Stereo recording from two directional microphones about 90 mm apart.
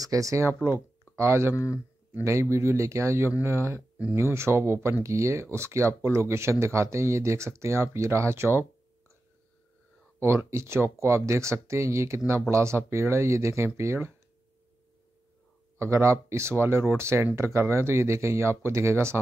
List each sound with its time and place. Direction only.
0.0 s speech: 40° right (ahead or behind)
1.5 s speech: 30° left (ahead or behind)
2.5 s speech: 30° right (ahead or behind)
10.2 s speech: 30° right (ahead or behind)
15.8 s speech: 30° right (ahead or behind)